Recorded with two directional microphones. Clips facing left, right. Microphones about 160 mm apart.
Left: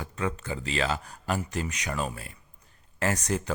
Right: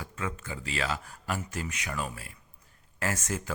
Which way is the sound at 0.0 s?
35° left (ahead or behind).